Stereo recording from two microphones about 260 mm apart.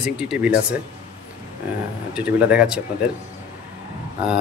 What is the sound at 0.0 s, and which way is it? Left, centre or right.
Speech, centre.